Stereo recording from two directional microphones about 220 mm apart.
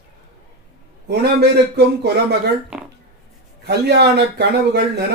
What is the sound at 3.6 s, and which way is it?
Speech, 50° right (ahead or behind).